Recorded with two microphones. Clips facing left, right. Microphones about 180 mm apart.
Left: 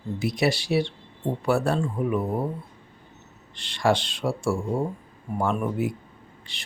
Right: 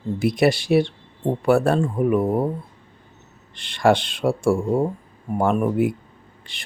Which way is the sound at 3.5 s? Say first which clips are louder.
Right 5 dB; 55° right (ahead or behind).